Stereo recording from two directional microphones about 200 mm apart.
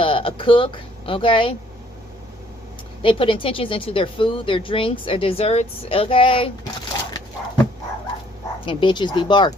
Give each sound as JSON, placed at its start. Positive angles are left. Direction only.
{"t": 0.0, "sound": "speech", "side_deg": 25}
{"t": 3.0, "sound": "a woman's voice", "side_deg": 25}
{"t": 8.6, "sound": "a woman's voice", "side_deg": 25}